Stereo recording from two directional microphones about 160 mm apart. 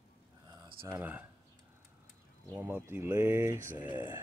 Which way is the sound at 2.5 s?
15° right (ahead or behind).